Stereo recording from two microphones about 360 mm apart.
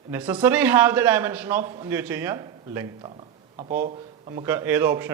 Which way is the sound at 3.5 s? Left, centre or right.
Right.